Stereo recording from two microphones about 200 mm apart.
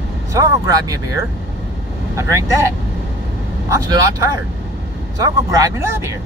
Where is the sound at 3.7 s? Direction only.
15° right (ahead or behind).